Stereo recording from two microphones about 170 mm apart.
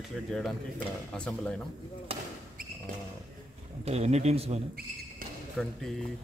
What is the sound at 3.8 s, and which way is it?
Speech, 40° right (ahead or behind).